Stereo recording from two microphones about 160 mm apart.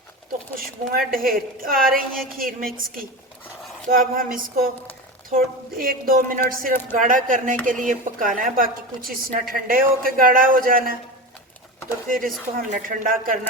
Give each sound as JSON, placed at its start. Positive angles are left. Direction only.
{"t": 0.5, "sound": "speech", "side_deg": -65}
{"t": 3.8, "sound": "speech", "side_deg": -60}
{"t": 12.0, "sound": "speech", "side_deg": -60}